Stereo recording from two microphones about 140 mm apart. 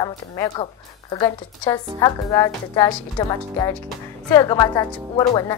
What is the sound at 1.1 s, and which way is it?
Speech, 30° left (ahead or behind).